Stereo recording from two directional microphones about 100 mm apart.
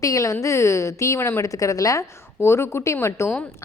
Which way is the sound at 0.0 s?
35° left (ahead or behind).